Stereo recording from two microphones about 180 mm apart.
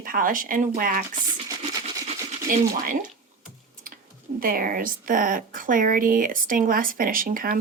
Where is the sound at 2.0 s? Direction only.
45° right (ahead or behind).